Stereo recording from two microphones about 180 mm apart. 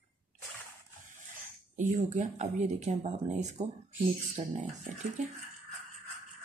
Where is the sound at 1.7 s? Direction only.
40° right (ahead or behind).